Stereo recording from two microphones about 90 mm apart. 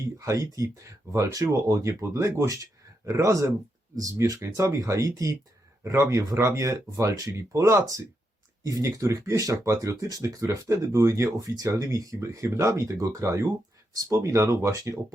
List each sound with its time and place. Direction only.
0.2 s speech: 35° right (ahead or behind)